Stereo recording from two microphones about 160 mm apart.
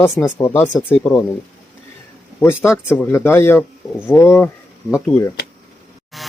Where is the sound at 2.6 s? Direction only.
15° left (ahead or behind).